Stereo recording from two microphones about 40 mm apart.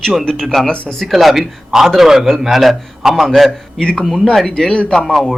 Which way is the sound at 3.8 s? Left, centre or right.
Centre.